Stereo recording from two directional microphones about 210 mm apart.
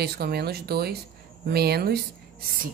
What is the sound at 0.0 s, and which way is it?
Speech, 50° right (ahead or behind).